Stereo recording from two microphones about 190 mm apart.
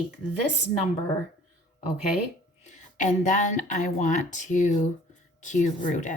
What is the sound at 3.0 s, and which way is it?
Speech, 40° left (ahead or behind).